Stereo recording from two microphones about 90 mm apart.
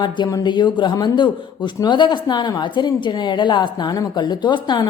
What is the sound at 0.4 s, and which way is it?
A man's voice, 55° left (ahead or behind).